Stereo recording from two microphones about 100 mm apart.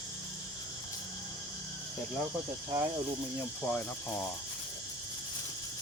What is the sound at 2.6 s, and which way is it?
Speech, 45° right (ahead or behind).